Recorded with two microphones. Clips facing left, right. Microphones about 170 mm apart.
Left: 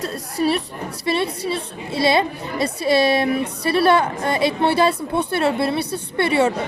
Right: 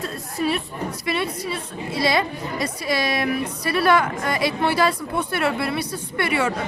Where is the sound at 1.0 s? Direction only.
30° left (ahead or behind).